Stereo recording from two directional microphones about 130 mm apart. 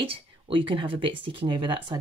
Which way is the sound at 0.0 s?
40° right (ahead or behind).